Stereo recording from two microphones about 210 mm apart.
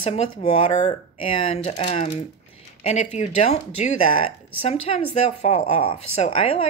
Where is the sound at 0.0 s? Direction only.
30° left (ahead or behind).